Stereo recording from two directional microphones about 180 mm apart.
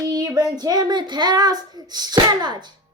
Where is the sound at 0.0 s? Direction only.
20° right (ahead or behind).